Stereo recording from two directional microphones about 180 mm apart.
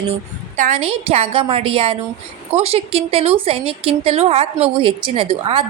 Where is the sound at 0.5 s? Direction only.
40° right (ahead or behind).